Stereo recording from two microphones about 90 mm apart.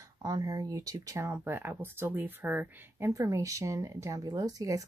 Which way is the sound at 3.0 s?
35° right (ahead or behind).